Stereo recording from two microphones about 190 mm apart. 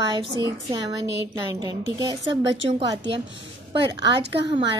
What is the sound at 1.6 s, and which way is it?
Speech, 20° right (ahead or behind).